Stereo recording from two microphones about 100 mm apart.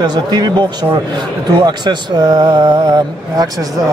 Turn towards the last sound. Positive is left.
turn(degrees=-45)  # may be behind; listen again after turning